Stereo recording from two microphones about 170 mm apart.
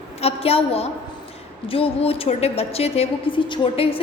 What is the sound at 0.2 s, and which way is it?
A woman's voice, 35° left (ahead or behind).